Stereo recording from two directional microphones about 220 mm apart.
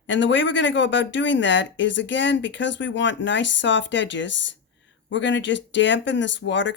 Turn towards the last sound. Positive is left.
turn(degrees=55)  # may be behind; listen again after turning